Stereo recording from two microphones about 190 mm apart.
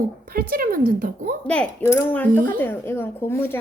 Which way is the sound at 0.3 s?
50° right (ahead or behind).